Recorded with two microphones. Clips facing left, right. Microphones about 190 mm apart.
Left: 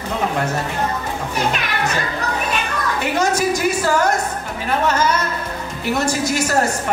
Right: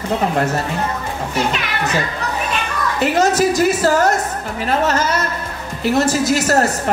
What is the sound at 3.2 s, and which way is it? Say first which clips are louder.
Speech: right 4 dB; 40° right (ahead or behind).